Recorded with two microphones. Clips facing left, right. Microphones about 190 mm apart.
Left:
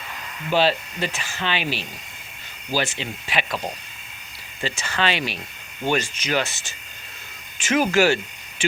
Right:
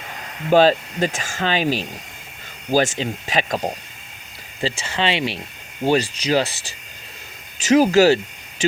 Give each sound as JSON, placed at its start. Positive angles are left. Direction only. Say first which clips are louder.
{"t": 0.5, "sound": "speech", "louder": "right 6 dB", "side_deg": -45}
{"t": 4.6, "sound": "speech", "louder": "right 2 dB", "side_deg": -30}